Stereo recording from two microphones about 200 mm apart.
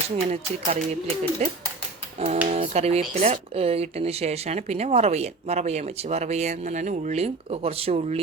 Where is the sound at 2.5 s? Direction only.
30° right (ahead or behind).